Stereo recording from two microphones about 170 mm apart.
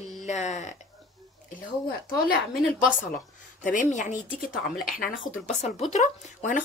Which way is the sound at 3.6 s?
45° left (ahead or behind).